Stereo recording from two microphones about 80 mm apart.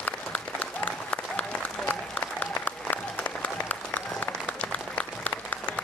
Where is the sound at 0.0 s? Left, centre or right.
Left.